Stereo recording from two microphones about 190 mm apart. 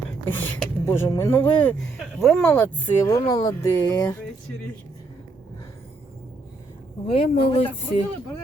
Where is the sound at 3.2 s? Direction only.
25° left (ahead or behind).